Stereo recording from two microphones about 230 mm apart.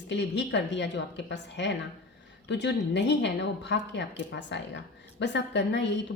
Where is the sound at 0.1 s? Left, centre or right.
Left.